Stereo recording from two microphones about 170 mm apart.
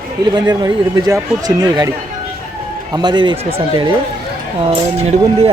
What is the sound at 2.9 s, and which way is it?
Speech, 25° right (ahead or behind).